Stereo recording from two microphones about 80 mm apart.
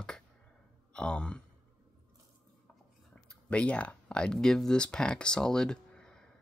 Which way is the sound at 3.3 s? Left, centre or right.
Centre.